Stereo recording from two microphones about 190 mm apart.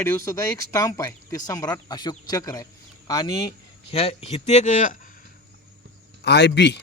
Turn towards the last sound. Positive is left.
turn(degrees=65)  # may be behind; listen again after turning